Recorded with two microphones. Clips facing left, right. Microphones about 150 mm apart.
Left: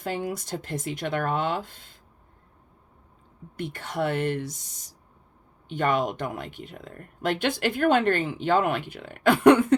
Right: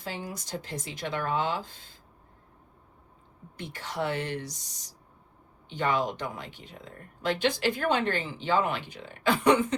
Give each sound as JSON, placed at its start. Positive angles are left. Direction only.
{"t": 0.0, "sound": "speech", "side_deg": 55}
{"t": 3.6, "sound": "speech", "side_deg": 50}
{"t": 5.6, "sound": "speech", "side_deg": 55}